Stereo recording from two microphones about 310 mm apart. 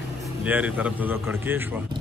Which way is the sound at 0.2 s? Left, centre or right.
Centre.